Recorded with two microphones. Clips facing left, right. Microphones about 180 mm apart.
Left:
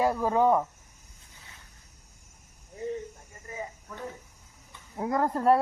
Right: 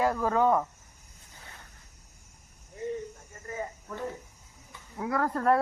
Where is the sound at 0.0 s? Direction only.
15° left (ahead or behind).